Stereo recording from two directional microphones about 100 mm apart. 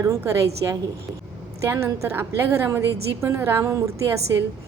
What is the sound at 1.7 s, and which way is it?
A woman's voice, 25° right (ahead or behind).